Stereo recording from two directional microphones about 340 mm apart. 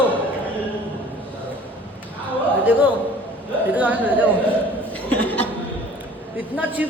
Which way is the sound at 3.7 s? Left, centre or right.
Centre.